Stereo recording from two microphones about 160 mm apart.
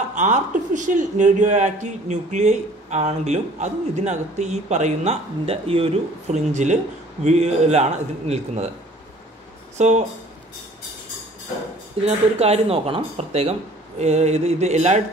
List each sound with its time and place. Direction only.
0.1 s speech: 50° right (ahead or behind)
9.8 s speech: 45° right (ahead or behind)
12.0 s speech: 40° right (ahead or behind)